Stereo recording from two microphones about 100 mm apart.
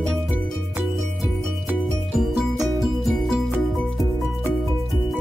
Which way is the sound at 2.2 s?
Centre (ahead or behind).